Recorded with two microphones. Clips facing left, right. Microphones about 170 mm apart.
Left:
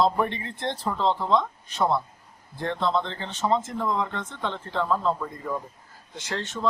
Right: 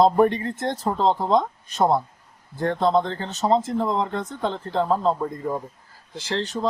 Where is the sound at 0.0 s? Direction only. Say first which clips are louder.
Right 6 dB; 45° right (ahead or behind).